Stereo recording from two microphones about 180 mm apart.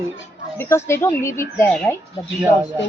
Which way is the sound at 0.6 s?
15° left (ahead or behind).